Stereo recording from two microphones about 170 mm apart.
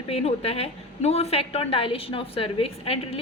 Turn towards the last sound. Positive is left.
turn(degrees=35)  # may be behind; listen again after turning